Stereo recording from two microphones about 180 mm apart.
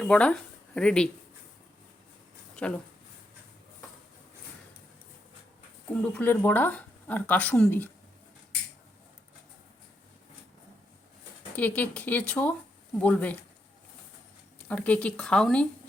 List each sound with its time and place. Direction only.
0.0 s speech: 5° left (ahead or behind)
2.6 s speech: 5° left (ahead or behind)
5.9 s speech: 5° left (ahead or behind)
11.5 s speech: 10° left (ahead or behind)
14.7 s speech: 10° left (ahead or behind)